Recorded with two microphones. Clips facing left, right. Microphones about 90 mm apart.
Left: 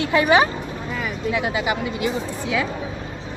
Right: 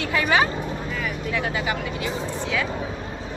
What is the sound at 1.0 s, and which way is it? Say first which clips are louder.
Speech: left 4 dB; 15° left (ahead or behind).